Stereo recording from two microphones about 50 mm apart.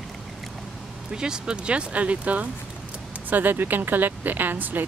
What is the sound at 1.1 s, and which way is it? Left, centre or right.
Speech, centre.